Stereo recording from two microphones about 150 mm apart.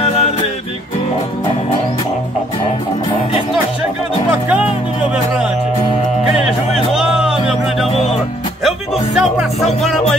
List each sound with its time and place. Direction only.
0.0 s music: 40° left (ahead or behind)
6.9 s music: 5° right (ahead or behind)
9.1 s music: 5° right (ahead or behind)